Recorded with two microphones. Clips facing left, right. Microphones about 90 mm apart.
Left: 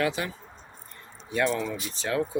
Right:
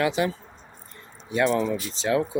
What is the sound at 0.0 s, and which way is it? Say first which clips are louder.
Speech: right 4 dB; 20° right (ahead or behind).